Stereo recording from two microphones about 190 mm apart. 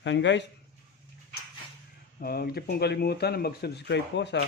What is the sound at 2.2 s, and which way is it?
Speech, 50° left (ahead or behind).